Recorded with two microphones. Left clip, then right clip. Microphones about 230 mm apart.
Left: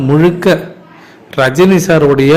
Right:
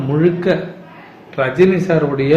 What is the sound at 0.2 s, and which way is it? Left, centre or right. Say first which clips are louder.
A man's voice: left 2 dB; left.